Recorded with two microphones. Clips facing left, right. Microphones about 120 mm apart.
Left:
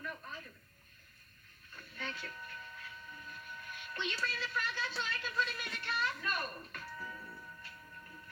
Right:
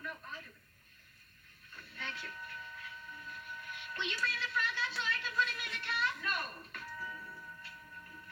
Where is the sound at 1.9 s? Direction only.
5° left (ahead or behind).